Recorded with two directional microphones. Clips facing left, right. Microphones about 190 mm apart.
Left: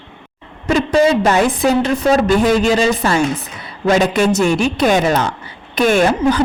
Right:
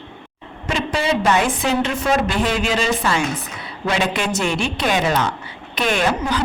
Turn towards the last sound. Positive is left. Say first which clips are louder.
# left 7 dB
turn(degrees=45)  # may be behind; listen again after turning